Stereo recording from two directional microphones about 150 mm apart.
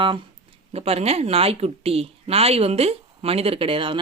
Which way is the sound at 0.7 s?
45° right (ahead or behind).